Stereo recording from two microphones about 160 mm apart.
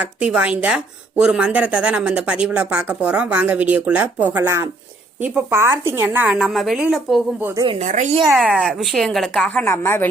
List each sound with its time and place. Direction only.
0.0 s speech: 5° right (ahead or behind)
7.8 s a woman's voice: 50° right (ahead or behind)
8.4 s a woman's voice: centre (ahead or behind); by 10.1 s 15° left (ahead or behind)